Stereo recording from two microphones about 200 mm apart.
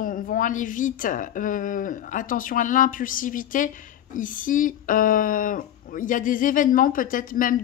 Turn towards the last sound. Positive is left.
turn(degrees=45)  # may be behind; listen again after turning